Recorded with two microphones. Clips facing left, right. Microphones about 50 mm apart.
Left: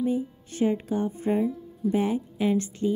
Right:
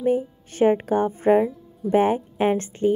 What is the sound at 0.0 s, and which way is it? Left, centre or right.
A woman's voice, right.